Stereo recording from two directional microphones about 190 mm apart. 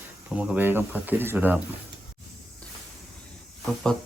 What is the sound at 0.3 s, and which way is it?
Speech, 5° right (ahead or behind).